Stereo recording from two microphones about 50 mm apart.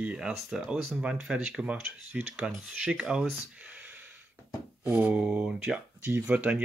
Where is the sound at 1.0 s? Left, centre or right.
Centre.